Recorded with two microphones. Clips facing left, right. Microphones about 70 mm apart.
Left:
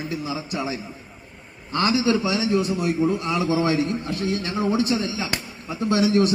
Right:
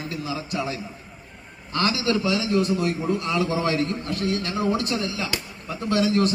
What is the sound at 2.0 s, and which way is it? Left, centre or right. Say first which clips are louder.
A man's voice: left 2 dB; centre.